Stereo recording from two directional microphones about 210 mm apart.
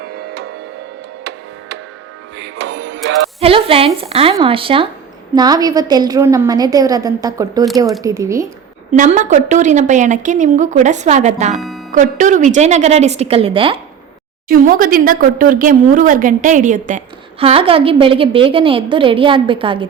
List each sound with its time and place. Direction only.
0.0 s music: 50° right (ahead or behind)
2.6 s music: 55° right (ahead or behind)
3.4 s a woman's voice: 25° right (ahead or behind)
8.9 s a woman's voice: 35° right (ahead or behind)
11.5 s speech: centre (ahead or behind)
11.9 s a woman's voice: 40° right (ahead or behind)
14.4 s a woman's voice: 40° right (ahead or behind)
17.4 s a woman's voice: 25° right (ahead or behind)